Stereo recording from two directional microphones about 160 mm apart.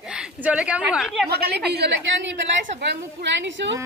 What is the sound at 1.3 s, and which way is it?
Speech, 85° right.